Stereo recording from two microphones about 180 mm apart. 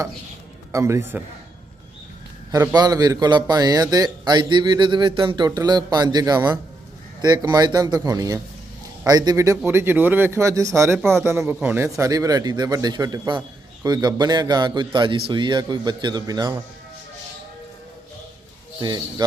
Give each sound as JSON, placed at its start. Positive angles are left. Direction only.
{"t": 0.7, "sound": "speech", "side_deg": -15}
{"t": 2.5, "sound": "a man's voice", "side_deg": -20}
{"t": 18.8, "sound": "a man's voice", "side_deg": -25}